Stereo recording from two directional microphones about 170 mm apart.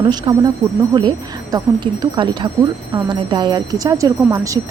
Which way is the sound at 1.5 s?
25° right (ahead or behind).